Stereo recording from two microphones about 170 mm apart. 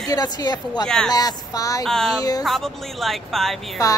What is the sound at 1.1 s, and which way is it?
Speech, 20° left (ahead or behind).